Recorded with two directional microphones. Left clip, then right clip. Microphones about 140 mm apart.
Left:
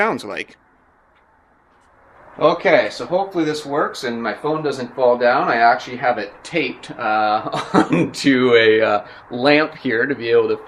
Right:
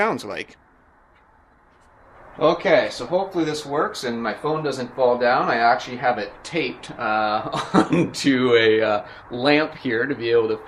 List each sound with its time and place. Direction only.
0.0 s speech: centre (ahead or behind)
2.4 s speech: 60° left (ahead or behind)